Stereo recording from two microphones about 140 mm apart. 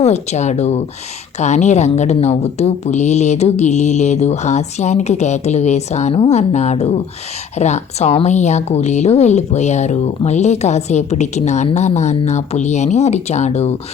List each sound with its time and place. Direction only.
0.0 s a woman's voice: 50° left (ahead or behind)